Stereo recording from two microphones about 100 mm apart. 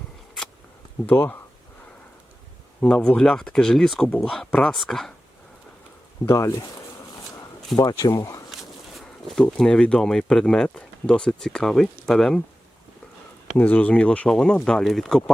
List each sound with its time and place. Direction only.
1.0 s speech: 20° left (ahead or behind)
2.8 s speech: 10° left (ahead or behind)
6.2 s speech: 30° left (ahead or behind)
7.8 s speech: 35° left (ahead or behind)
8.4 s speech: centre (ahead or behind)
13.6 s speech: 15° left (ahead or behind)